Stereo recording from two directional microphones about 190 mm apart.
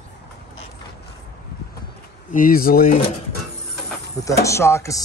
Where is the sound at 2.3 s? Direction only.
50° left (ahead or behind).